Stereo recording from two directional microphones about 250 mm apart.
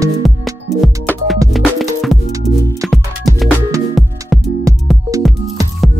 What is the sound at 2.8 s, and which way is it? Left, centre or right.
Music, centre.